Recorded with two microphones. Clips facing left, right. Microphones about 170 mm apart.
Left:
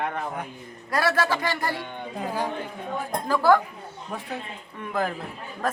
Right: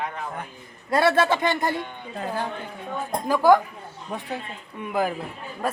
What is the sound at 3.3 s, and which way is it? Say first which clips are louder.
Speech: right 2 dB; 15° right (ahead or behind).